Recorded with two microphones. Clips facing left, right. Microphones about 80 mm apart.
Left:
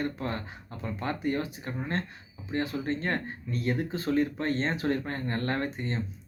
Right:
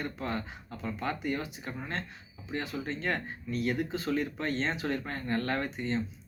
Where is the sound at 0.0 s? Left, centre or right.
Left.